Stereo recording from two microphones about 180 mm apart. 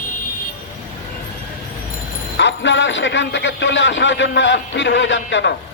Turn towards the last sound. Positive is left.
turn(degrees=90)